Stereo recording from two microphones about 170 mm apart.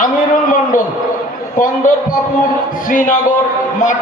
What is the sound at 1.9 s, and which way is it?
A man's voice, 50° left (ahead or behind).